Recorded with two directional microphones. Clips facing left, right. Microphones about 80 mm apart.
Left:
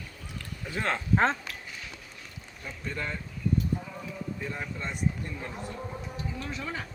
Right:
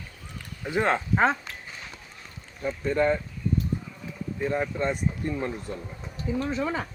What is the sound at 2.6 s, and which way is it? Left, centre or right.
Speech, right.